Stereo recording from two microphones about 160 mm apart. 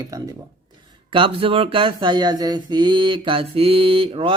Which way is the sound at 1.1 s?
35° right (ahead or behind).